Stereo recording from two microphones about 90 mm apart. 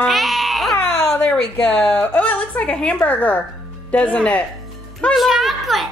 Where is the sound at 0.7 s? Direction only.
30° left (ahead or behind).